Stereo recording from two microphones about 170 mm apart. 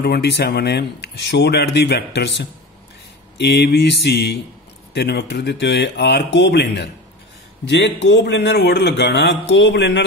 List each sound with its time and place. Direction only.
0.0 s a man's voice: 75° left (ahead or behind)